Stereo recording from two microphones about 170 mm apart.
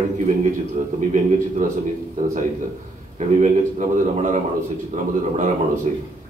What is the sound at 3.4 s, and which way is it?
A man's voice, 45° right (ahead or behind).